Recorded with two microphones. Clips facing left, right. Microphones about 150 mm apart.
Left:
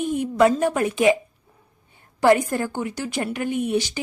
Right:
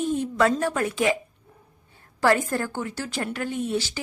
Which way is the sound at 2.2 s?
15° left (ahead or behind).